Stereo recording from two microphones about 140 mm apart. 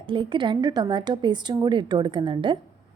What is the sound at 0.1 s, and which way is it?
A woman's voice, 35° right (ahead or behind).